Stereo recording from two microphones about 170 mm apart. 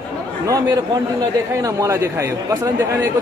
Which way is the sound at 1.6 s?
20° right (ahead or behind).